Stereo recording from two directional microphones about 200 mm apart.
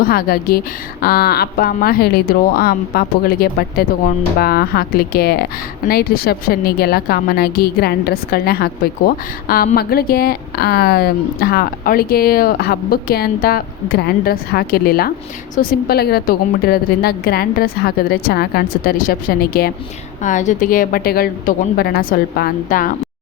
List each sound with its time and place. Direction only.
0.0 s a woman's voice: 50° left (ahead or behind)